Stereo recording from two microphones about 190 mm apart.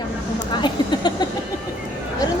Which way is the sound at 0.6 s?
25° left (ahead or behind).